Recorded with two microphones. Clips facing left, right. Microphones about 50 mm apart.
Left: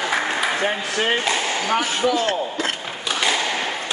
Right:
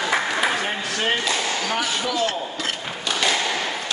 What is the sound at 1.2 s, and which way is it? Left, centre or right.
Speech, left.